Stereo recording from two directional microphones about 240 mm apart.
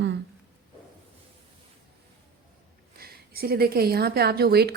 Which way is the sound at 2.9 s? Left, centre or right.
Right.